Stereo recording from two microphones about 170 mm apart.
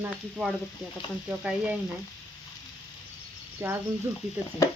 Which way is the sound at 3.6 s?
15° right (ahead or behind).